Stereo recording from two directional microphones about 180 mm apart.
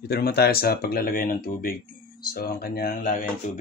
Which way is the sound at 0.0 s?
60° left (ahead or behind).